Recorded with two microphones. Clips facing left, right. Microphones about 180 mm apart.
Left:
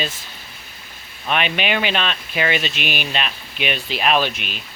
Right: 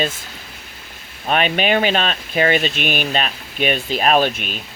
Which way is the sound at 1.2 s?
40° right (ahead or behind).